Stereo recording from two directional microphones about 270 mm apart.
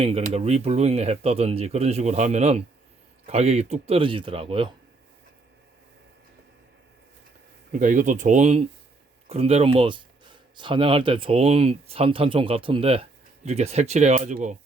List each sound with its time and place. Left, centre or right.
0.0 s speech: right
7.7 s speech: right